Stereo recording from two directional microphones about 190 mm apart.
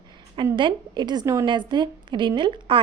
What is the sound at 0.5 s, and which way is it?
A woman's voice, 25° right (ahead or behind).